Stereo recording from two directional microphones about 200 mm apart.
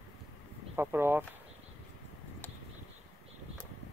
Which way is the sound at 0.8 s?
10° right (ahead or behind).